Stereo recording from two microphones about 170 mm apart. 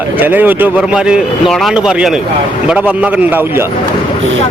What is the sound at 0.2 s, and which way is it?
A man's voice, 10° right (ahead or behind).